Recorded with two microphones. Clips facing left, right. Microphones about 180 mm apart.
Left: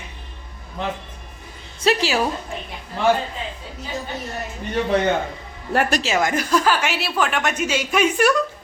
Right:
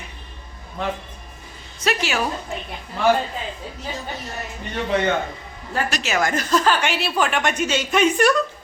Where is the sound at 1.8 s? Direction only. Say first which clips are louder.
Left 4 dB; 30° left (ahead or behind).